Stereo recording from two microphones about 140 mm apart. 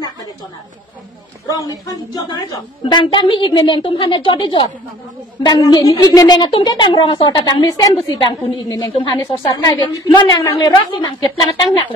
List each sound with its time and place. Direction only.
1.5 s a woman's voice: 25° left (ahead or behind)